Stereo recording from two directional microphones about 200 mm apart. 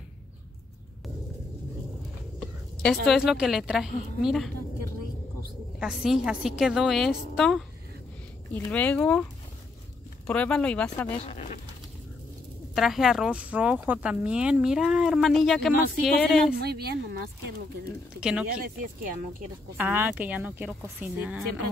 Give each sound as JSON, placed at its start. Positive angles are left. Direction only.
{"t": 2.4, "sound": "a woman's voice", "side_deg": 0}
{"t": 5.8, "sound": "speech", "side_deg": -5}
{"t": 8.6, "sound": "speech", "side_deg": 5}
{"t": 10.2, "sound": "speech", "side_deg": 5}
{"t": 11.1, "sound": "speech", "side_deg": 30}
{"t": 12.7, "sound": "speech", "side_deg": 0}
{"t": 16.5, "sound": "a woman's voice", "side_deg": -55}
{"t": 18.2, "sound": "speech", "side_deg": -5}
{"t": 19.8, "sound": "speech", "side_deg": -10}